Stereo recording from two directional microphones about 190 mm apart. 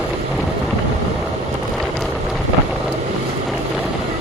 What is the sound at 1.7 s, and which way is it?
Wind, centre (ahead or behind).